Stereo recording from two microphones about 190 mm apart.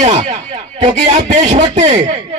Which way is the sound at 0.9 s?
35° right (ahead or behind).